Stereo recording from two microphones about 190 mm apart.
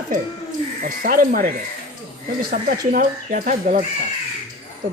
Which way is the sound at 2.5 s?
45° right (ahead or behind).